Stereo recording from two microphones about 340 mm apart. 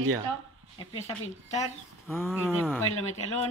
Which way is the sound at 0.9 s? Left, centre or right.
Centre.